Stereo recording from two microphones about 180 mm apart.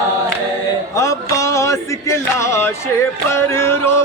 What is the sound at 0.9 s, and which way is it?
Music, 15° left (ahead or behind).